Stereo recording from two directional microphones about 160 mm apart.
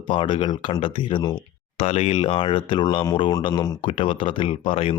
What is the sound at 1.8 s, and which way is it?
Speech, 40° left (ahead or behind).